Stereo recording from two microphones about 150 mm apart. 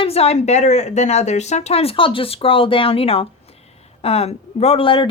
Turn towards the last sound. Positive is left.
turn(degrees=35)  # may be behind; listen again after turning